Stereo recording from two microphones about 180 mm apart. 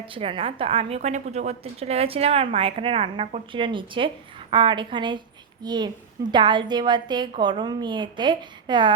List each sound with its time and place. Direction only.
0.0 s a woman's voice: 30° right (ahead or behind)